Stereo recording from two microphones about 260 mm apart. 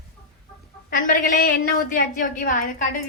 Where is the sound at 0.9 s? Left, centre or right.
Left.